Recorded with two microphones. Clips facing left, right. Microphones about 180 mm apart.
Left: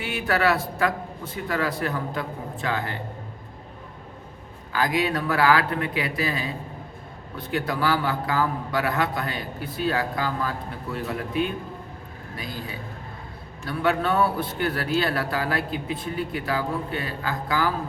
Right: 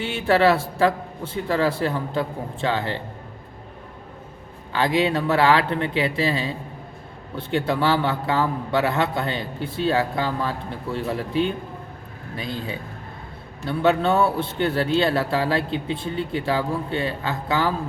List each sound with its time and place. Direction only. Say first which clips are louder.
0.0 s a man's voice: right 5 dB; 25° right (ahead or behind)
4.7 s a man's voice: right 3 dB; 25° right (ahead or behind)